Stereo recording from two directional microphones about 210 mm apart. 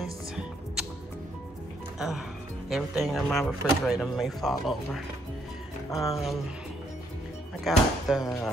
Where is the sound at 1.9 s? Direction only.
Centre (ahead or behind).